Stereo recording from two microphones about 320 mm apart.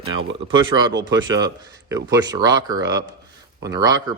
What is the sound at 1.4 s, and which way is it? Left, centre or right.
Speech, centre.